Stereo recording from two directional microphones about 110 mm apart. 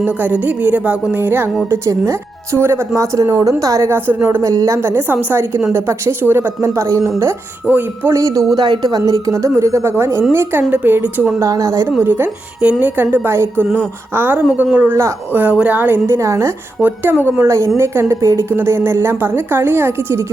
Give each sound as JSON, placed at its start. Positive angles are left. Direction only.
{"t": 0.0, "sound": "a woman's voice", "side_deg": -15}
{"t": 4.4, "sound": "a woman's voice", "side_deg": -30}
{"t": 11.3, "sound": "speech", "side_deg": -30}
{"t": 11.9, "sound": "a woman's voice", "side_deg": -20}